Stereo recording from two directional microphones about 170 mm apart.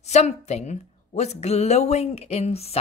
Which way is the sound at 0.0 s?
40° left (ahead or behind).